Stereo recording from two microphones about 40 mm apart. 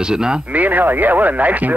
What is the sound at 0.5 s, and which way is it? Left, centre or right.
Speech, right.